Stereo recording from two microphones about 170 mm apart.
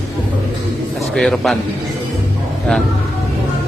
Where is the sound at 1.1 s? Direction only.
Centre (ahead or behind).